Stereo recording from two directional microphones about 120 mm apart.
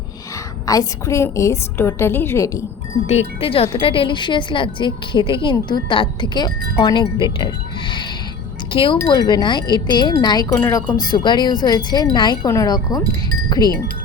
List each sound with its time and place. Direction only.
0.7 s a woman's voice: 30° left (ahead or behind)
3.1 s speech: 55° left (ahead or behind); by 13.7 s 35° left (ahead or behind)